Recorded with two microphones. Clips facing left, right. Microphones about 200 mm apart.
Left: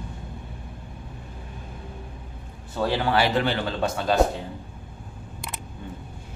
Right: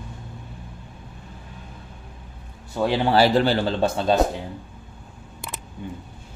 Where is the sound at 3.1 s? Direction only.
35° right (ahead or behind).